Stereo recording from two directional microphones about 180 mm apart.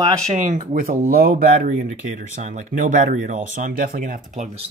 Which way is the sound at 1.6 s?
45° right (ahead or behind).